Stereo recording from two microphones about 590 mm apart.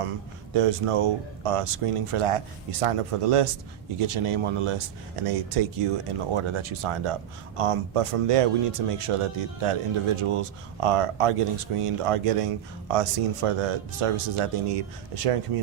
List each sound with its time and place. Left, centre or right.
0.5 s speech: right